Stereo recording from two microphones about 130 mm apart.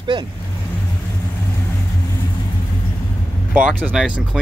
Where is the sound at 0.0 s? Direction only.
35° right (ahead or behind).